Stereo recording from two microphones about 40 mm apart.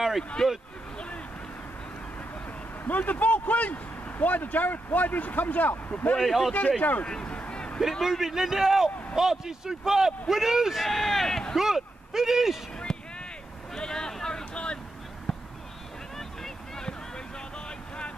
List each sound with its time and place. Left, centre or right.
0.4 s speech: centre
0.9 s vehicle: left
2.8 s speech: left
6.2 s speech: centre
6.8 s speech: left
7.1 s speech: left
7.3 s a sound: left
8.0 s a man's voice: centre
11.5 s speech: centre
12.9 s vehicle: centre
13.7 s a sound: centre
15.3 s basketball bounce: centre
16.2 s vehicle: centre
17.6 s vehicle: left